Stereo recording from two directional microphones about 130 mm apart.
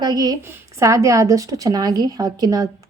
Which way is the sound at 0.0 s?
30° right (ahead or behind).